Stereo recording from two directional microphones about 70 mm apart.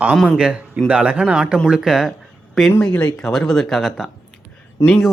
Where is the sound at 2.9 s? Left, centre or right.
Left.